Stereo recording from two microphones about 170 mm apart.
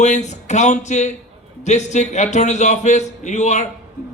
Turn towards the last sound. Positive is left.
turn(degrees=45)  # may be behind; listen again after turning